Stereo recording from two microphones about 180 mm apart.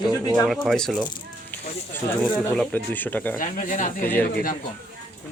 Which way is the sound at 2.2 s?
5° left (ahead or behind).